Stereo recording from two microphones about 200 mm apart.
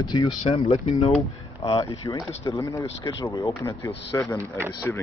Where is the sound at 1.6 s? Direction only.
20° left (ahead or behind).